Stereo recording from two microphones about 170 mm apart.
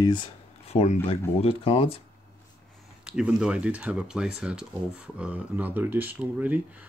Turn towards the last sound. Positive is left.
turn(degrees=-10)  # may be behind; listen again after turning